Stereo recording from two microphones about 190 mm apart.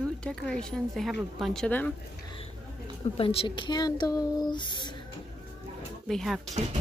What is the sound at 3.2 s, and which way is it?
Speech, 30° left (ahead or behind).